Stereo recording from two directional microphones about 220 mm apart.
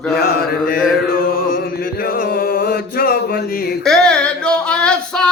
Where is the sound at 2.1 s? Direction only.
40° left (ahead or behind).